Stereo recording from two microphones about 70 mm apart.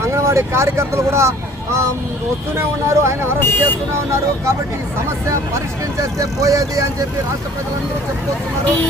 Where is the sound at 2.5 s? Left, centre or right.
Right.